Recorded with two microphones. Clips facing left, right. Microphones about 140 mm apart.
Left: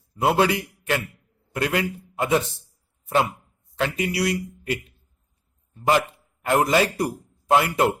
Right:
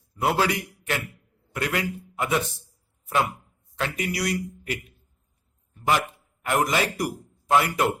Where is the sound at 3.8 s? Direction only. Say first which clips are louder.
Left 4 dB; 30° left (ahead or behind).